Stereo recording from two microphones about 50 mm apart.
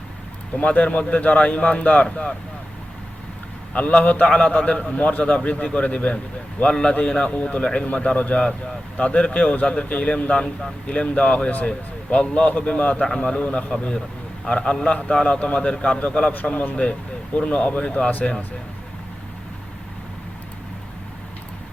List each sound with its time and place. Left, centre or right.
0.5 s a man's voice: left
3.7 s a man's voice: left
13.1 s a man's voice: centre
17.3 s a man's voice: left